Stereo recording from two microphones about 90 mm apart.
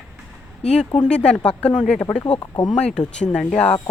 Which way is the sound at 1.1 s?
10° left (ahead or behind).